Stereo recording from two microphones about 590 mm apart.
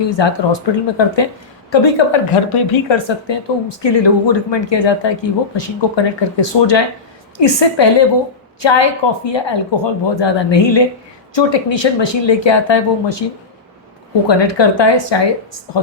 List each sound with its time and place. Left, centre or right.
0.0 s a woman's voice: left
14.3 s a woman's voice: left